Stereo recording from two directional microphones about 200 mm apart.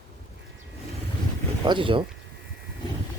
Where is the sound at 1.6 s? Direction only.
25° right (ahead or behind).